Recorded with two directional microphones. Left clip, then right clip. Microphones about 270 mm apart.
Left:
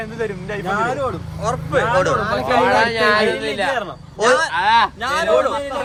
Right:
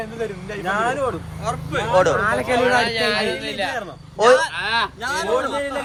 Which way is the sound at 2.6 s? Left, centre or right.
Left.